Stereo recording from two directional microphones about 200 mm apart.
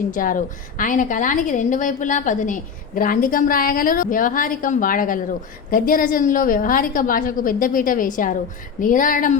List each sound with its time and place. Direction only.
0.1 s a woman's voice: 40° left (ahead or behind)